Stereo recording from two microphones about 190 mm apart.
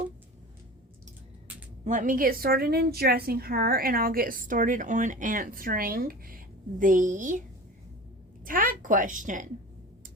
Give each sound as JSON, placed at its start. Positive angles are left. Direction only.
{"t": 1.8, "sound": "a woman's voice", "side_deg": -40}
{"t": 8.4, "sound": "a woman's voice", "side_deg": -45}